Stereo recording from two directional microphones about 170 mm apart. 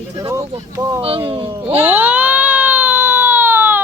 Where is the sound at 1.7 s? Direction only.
10° right (ahead or behind).